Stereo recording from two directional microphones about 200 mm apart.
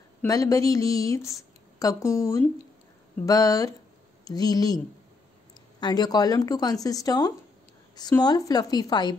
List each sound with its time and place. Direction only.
0.2 s speech: 15° left (ahead or behind)